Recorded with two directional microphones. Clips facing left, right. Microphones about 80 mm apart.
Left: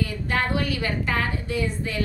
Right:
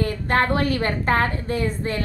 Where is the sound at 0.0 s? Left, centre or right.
Right.